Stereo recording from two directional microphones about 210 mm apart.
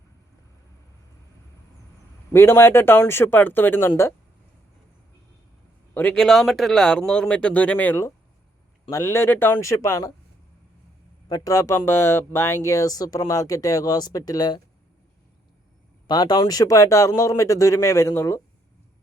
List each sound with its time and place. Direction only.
2.3 s speech: 10° left (ahead or behind)
5.9 s speech: 5° left (ahead or behind)
11.3 s speech: 15° left (ahead or behind)
16.0 s speech: 20° left (ahead or behind)